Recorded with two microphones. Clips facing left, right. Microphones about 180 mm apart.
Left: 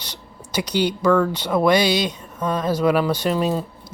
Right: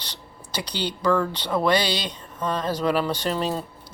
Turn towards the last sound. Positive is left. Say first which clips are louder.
# left 5 dB
turn(degrees=10)  # may be behind; listen again after turning